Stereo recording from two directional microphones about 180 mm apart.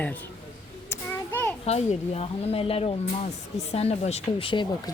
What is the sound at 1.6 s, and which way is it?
Speech, 35° left (ahead or behind).